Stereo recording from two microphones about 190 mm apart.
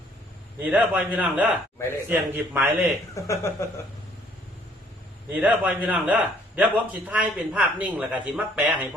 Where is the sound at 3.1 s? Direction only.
15° left (ahead or behind).